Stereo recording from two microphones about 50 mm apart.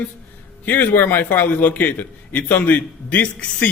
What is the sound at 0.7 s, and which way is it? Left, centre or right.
A man's voice, left.